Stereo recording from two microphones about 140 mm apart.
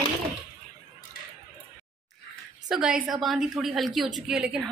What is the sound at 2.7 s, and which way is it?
Speech, 5° right (ahead or behind).